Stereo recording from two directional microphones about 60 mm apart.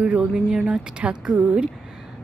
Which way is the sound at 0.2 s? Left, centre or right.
Centre.